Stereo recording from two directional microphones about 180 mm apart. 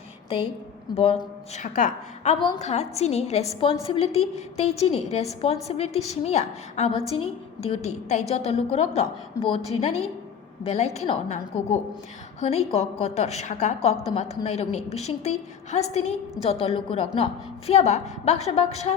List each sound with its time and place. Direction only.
0.9 s a woman's voice: 35° left (ahead or behind)